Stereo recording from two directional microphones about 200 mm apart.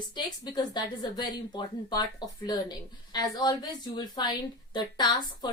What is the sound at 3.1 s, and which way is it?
A woman's voice, 20° left (ahead or behind).